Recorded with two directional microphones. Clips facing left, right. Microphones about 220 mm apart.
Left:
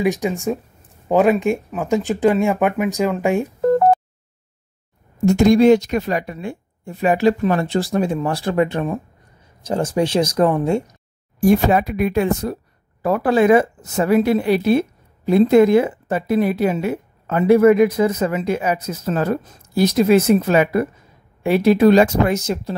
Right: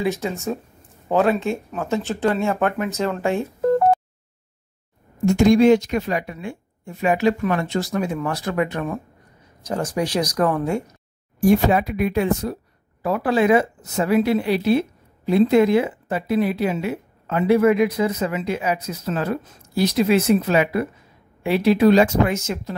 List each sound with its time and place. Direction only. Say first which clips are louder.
0.0 s speech: left 4 dB; 15° left (ahead or behind)
5.2 s a woman's voice: left 2 dB; 40° left (ahead or behind)
11.4 s speech: left 2 dB; 45° left (ahead or behind)